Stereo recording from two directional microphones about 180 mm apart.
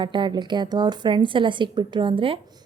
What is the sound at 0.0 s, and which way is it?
A woman's voice, 25° right (ahead or behind).